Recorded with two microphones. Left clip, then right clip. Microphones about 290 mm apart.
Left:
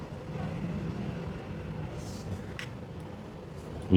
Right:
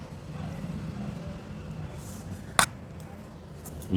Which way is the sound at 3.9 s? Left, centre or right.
Centre.